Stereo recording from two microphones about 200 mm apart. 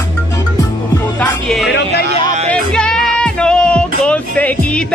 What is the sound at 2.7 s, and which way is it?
Music, 5° left (ahead or behind).